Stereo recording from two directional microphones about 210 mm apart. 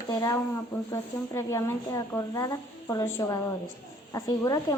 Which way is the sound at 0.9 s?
15° left (ahead or behind).